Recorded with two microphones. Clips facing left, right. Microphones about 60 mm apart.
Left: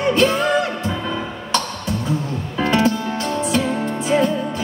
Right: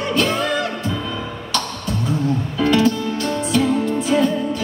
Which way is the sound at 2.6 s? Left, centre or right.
Left.